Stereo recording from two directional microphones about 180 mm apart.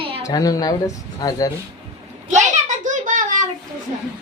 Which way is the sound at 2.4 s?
40° right (ahead or behind).